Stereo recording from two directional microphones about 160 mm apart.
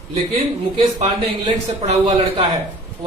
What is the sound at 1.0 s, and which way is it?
A man's voice, 40° right (ahead or behind).